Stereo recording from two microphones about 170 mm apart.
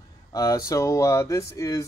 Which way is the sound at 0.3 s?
20° left (ahead or behind).